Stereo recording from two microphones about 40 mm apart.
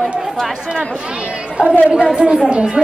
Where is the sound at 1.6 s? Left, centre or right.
Centre.